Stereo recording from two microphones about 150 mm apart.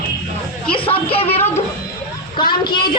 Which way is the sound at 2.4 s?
30° left (ahead or behind).